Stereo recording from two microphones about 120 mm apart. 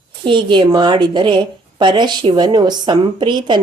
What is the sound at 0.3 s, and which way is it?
A woman's voice, 40° right (ahead or behind).